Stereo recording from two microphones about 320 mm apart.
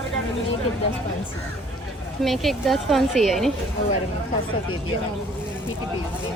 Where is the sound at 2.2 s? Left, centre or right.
Centre.